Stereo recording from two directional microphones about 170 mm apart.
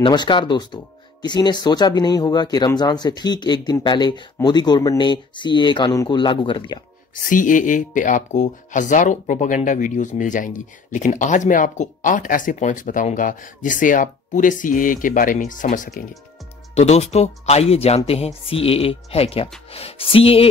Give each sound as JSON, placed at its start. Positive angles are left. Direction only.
{"t": 0.0, "sound": "speech", "side_deg": 25}
{"t": 7.2, "sound": "speech", "side_deg": 50}
{"t": 16.7, "sound": "speech", "side_deg": 40}